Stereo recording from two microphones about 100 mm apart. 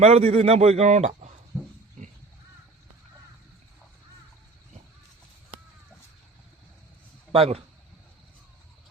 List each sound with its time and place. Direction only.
0.1 s a man's voice: 90° right
1.5 s pig: centre (ahead or behind)
7.3 s speech: 75° right (ahead or behind)